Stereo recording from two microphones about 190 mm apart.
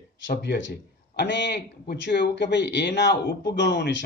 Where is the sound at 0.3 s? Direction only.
60° left (ahead or behind).